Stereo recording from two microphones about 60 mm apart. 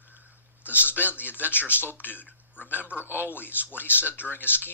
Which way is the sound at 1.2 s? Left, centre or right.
Left.